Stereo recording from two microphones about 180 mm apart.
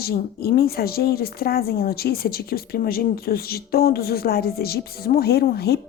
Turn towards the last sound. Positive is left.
turn(degrees=60)  # may be behind; listen again after turning